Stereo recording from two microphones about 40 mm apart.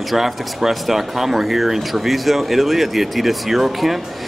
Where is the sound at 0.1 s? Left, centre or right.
Centre.